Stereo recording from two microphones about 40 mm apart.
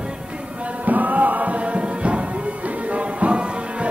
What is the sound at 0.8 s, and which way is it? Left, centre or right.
Music, right.